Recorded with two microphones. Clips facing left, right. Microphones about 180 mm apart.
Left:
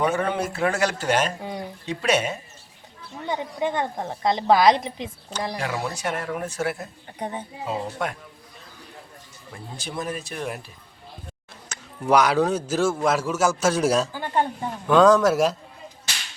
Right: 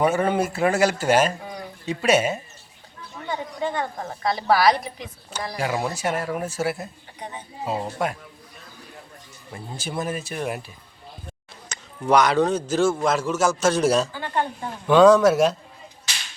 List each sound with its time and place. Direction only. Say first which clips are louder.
0.0 s speech: right 3 dB; 5° right (ahead or behind)
3.2 s a woman's voice: left 2 dB; 20° left (ahead or behind)
5.5 s speech: right 3 dB; 10° right (ahead or behind)
9.7 s speech: right 2 dB; 5° right (ahead or behind)
11.7 s a man's voice: even; 5° left (ahead or behind)
14.8 s speech: right 2 dB; centre (ahead or behind)